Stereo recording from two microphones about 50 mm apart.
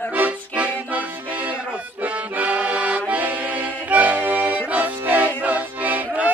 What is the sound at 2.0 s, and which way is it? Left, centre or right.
Accordion, right.